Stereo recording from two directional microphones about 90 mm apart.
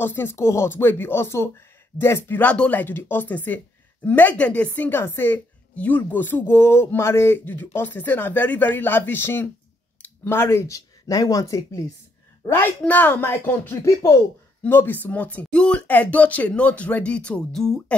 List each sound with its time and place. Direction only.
0.0 s speech: 25° left (ahead or behind)
12.4 s speech: 25° left (ahead or behind)
14.6 s speech: 25° left (ahead or behind); by 17.9 s 5° left (ahead or behind)